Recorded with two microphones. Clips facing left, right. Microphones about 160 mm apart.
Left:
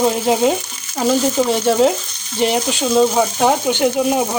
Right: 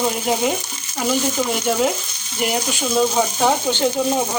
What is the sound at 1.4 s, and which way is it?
Speech, 25° left (ahead or behind).